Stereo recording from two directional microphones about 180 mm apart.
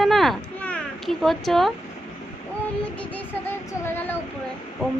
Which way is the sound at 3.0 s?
10° left (ahead or behind).